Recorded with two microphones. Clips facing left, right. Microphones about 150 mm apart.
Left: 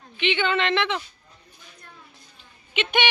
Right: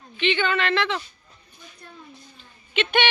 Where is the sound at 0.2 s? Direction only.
15° left (ahead or behind).